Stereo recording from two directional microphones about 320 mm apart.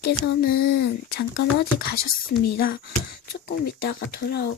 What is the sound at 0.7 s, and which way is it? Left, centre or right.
Speech, left.